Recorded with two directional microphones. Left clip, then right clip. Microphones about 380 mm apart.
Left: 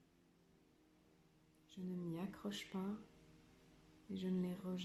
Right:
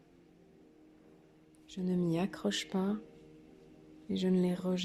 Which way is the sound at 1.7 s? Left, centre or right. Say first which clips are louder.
Right 14 dB; right.